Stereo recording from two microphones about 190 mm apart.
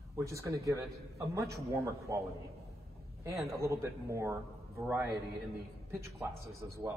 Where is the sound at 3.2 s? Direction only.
15° right (ahead or behind).